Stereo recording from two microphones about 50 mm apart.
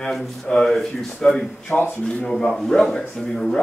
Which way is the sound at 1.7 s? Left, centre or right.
Left.